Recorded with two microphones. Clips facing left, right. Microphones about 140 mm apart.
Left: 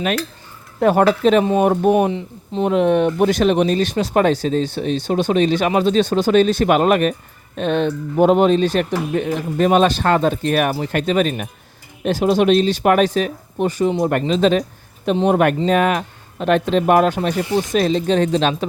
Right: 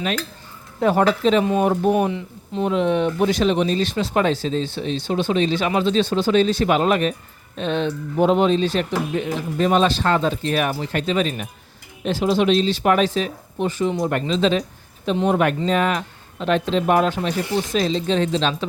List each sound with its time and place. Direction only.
0.8 s speech: 55° left (ahead or behind)
2.0 s speech: 30° left (ahead or behind)
2.6 s speech: 55° left (ahead or behind)